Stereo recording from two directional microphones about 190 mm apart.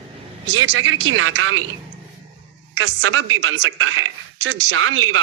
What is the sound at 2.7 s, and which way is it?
Speech, 90° right.